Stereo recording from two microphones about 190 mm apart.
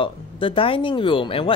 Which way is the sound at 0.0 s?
25° left (ahead or behind).